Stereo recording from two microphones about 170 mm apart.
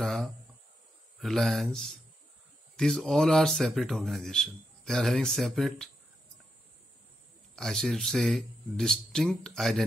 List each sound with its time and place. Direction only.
0.0 s a sound: centre (ahead or behind)
1.2 s speech: centre (ahead or behind)
7.5 s speech: centre (ahead or behind)